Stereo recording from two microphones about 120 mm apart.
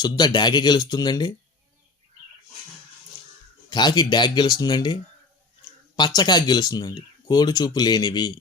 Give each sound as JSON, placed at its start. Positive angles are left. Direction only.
{"t": 0.0, "sound": "speech", "side_deg": 35}
{"t": 3.7, "sound": "speech", "side_deg": 35}
{"t": 6.0, "sound": "speech", "side_deg": 35}